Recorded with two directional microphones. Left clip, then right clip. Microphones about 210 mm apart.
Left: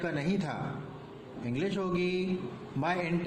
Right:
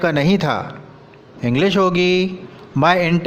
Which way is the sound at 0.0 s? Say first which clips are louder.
Right 16 dB; 45° right (ahead or behind).